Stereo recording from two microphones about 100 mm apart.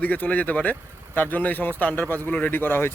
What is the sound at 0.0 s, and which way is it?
Speech, 15° left (ahead or behind).